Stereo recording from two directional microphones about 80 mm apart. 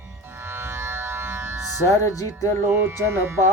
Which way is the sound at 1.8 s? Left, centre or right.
Left.